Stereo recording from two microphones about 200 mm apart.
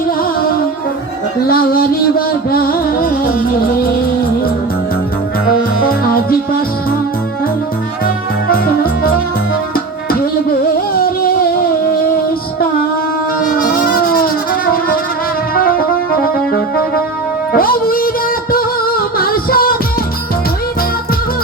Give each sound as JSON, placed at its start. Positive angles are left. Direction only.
{"t": 1.5, "sound": "music", "side_deg": 50}
{"t": 8.0, "sound": "music", "side_deg": 50}
{"t": 13.4, "sound": "a sound", "side_deg": 45}
{"t": 15.5, "sound": "music", "side_deg": 45}